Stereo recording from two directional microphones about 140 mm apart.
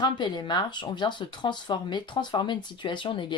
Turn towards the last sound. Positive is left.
turn(degrees=35)  # may be behind; listen again after turning